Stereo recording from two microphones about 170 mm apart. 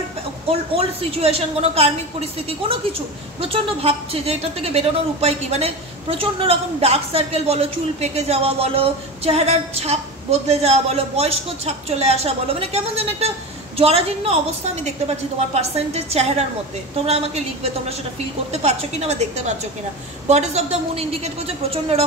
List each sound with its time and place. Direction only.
0.5 s a woman's voice: 35° right (ahead or behind)
18.5 s a woman's voice: 40° right (ahead or behind)